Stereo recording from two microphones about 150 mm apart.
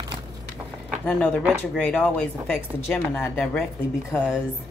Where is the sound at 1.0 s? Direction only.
5° left (ahead or behind).